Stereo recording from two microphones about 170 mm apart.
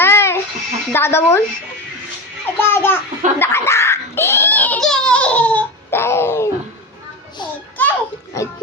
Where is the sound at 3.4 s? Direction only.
15° left (ahead or behind).